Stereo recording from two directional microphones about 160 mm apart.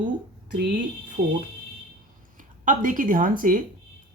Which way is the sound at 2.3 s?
55° right (ahead or behind).